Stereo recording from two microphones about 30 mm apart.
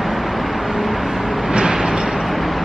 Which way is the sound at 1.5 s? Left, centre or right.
Right.